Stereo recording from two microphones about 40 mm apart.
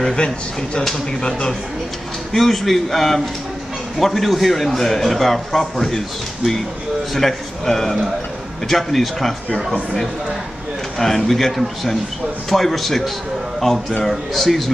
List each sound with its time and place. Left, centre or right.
0.0 s speech: centre
2.3 s a man's voice: centre
11.0 s a man's voice: centre